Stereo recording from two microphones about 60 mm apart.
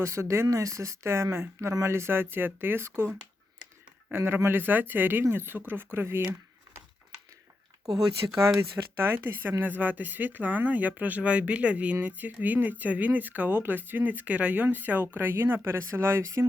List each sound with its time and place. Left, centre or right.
0.0 s speech: right
0.4 s speech: right
7.9 s speech: centre
9.0 s speech: right